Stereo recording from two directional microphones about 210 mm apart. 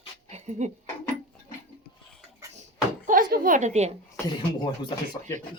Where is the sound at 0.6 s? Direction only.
35° right (ahead or behind).